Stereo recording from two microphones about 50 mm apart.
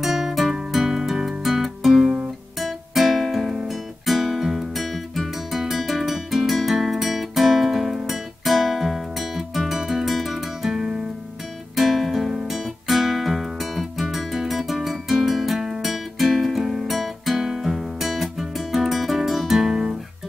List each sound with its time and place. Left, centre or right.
0.0 s music: centre